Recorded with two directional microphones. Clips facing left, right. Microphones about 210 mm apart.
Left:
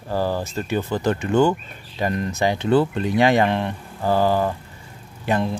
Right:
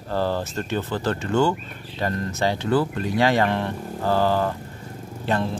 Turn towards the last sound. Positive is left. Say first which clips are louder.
# left 2 dB
turn(degrees=10)  # may be behind; listen again after turning